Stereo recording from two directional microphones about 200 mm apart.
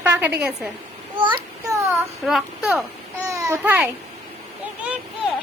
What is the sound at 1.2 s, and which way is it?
Speech, 20° right (ahead or behind).